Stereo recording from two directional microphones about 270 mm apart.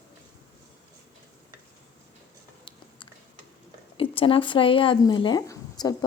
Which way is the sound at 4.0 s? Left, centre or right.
Centre.